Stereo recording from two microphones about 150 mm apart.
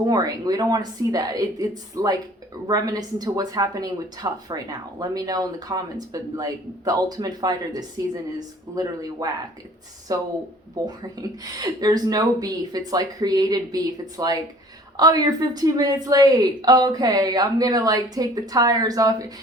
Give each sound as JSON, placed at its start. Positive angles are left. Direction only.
{"t": 0.1, "sound": "a woman's voice", "side_deg": -25}
{"t": 11.5, "sound": "a woman's voice", "side_deg": -25}